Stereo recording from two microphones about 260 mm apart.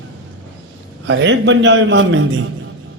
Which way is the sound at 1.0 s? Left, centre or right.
Right.